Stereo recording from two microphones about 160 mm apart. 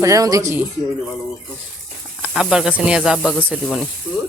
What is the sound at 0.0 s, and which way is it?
Speech, 20° right (ahead or behind).